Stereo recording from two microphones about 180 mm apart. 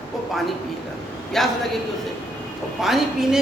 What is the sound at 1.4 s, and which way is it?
Speech, centre (ahead or behind).